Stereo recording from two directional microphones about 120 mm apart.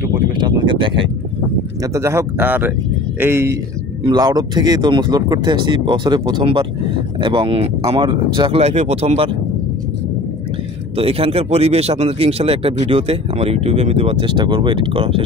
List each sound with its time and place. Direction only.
0.4 s a sound: 40° right (ahead or behind)
1.8 s speech: 25° right (ahead or behind)
4.0 s speech: 35° right (ahead or behind); by 8.0 s 55° right (ahead or behind)
8.0 s speech: 40° right (ahead or behind)
8.5 s speech: 65° right (ahead or behind)
11.0 s speech: 55° right (ahead or behind)